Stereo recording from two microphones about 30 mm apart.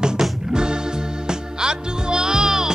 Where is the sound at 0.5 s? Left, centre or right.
Right.